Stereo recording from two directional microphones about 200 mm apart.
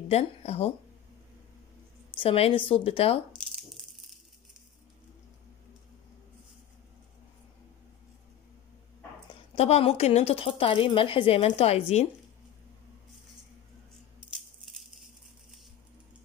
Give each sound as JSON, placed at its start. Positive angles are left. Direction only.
{"t": 0.1, "sound": "speech", "side_deg": 30}
{"t": 2.1, "sound": "a woman's voice", "side_deg": 30}
{"t": 9.6, "sound": "a woman's voice", "side_deg": 30}
{"t": 14.3, "sound": "rattle", "side_deg": 0}